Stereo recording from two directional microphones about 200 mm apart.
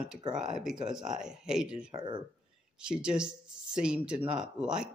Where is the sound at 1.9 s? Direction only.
20° right (ahead or behind).